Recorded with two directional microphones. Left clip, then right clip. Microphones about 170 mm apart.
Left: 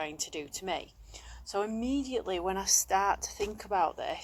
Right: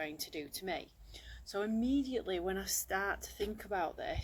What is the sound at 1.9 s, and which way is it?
Speech, 55° left (ahead or behind).